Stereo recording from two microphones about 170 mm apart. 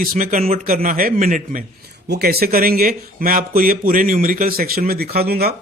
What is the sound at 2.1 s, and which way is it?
Speech, 65° right (ahead or behind).